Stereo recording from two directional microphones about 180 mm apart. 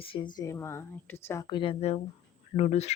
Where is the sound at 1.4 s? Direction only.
25° left (ahead or behind).